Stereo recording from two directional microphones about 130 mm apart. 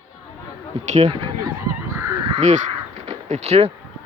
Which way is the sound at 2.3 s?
65° right (ahead or behind).